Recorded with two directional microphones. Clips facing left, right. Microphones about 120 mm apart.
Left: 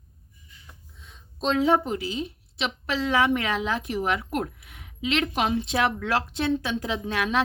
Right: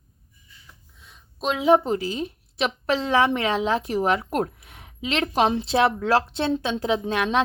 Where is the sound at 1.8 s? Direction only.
40° right (ahead or behind).